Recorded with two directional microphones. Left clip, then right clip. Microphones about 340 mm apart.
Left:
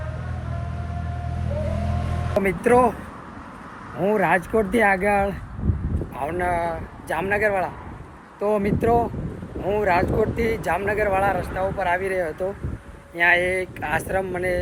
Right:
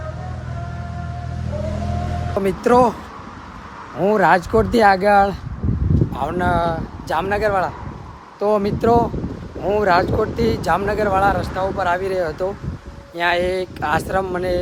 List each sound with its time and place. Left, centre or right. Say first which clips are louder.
2.4 s speech: right 3 dB; centre
4.0 s speech: right 5 dB; centre